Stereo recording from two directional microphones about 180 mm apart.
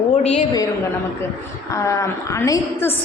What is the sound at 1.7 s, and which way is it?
A woman's voice, 15° left (ahead or behind).